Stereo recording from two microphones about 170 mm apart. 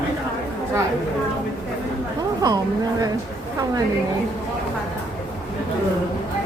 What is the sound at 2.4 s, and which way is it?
Speech, 20° right (ahead or behind).